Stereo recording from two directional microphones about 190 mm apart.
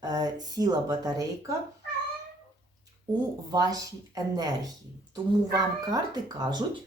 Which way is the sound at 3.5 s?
20° right (ahead or behind).